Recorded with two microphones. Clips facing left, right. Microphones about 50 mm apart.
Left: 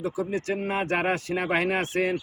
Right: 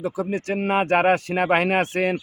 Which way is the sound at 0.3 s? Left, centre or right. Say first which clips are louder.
Right 4 dB; right.